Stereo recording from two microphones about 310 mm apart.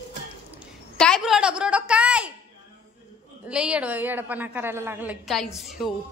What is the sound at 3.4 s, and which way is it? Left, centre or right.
A woman's voice, centre.